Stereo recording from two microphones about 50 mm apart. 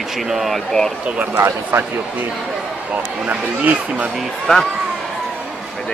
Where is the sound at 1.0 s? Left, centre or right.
Right.